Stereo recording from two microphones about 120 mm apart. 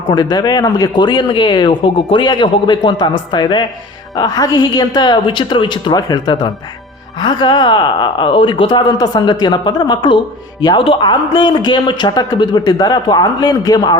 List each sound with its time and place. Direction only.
0.1 s speech: 35° left (ahead or behind)